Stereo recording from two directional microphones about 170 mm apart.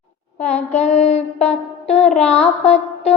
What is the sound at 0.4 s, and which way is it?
Child singing, 40° left (ahead or behind).